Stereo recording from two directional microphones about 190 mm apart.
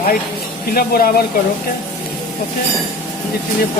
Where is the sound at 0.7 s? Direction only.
50° left (ahead or behind).